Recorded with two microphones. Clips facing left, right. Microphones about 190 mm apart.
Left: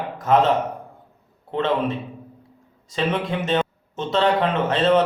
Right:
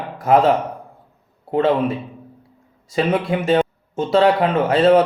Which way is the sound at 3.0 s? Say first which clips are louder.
Right 5 dB; 40° right (ahead or behind).